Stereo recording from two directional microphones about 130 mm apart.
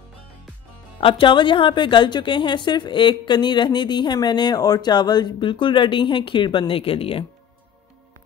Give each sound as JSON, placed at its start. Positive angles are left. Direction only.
{"t": 1.0, "sound": "a woman's voice", "side_deg": 40}